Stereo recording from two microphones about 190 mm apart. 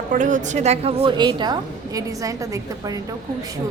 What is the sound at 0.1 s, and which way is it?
A woman's voice, 40° right (ahead or behind).